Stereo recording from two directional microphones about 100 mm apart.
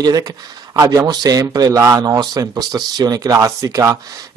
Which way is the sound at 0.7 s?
40° right (ahead or behind).